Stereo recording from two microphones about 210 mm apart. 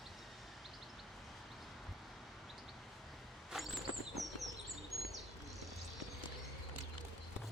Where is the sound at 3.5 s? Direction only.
Centre (ahead or behind).